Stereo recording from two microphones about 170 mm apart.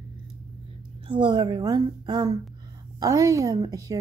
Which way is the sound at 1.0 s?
25° right (ahead or behind).